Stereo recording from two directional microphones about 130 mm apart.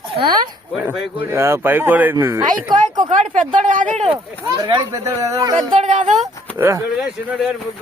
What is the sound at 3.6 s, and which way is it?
Speech, 85° right.